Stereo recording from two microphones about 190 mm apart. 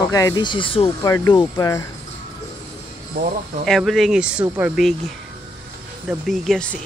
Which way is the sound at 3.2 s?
55° right (ahead or behind).